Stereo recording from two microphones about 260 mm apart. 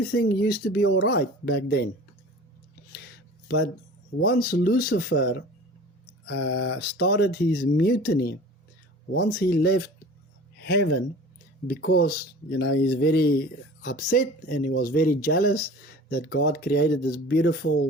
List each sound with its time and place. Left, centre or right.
0.0 s speech: left
4.3 s speech: left
12.5 s speech: left
12.8 s speech: left